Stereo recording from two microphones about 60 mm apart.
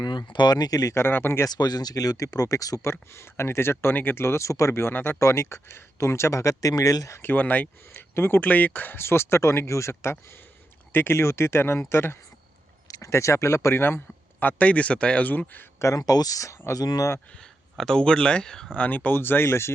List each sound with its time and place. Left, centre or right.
0.2 s speech: left
0.9 s speech: left
1.5 s speech: left
2.8 s speech: left
4.7 s speech: left
7.2 s speech: left
12.9 s speech: left
16.0 s speech: left
17.3 s speech: centre
18.8 s speech: left